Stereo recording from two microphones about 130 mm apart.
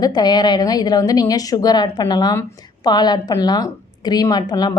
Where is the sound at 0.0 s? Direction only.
30° left (ahead or behind).